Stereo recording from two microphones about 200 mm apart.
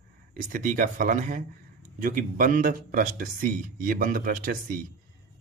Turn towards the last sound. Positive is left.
turn(degrees=-45)  # may be behind; listen again after turning